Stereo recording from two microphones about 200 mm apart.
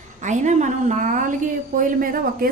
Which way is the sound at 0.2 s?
35° right (ahead or behind).